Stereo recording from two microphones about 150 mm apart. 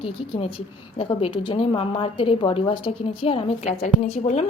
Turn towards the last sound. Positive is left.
turn(degrees=50)  # may be behind; listen again after turning